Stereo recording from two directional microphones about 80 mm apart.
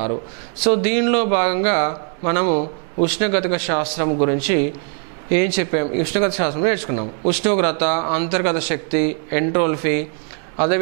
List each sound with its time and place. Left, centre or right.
0.7 s speech: centre